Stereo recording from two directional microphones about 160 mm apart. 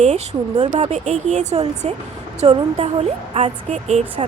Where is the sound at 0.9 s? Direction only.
45° right (ahead or behind).